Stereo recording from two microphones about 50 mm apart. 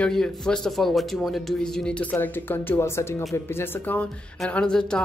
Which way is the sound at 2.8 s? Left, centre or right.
Left.